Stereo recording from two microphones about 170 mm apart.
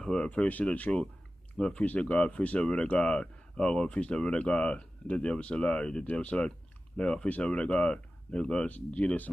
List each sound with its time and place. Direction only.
0.0 s speech: 5° left (ahead or behind)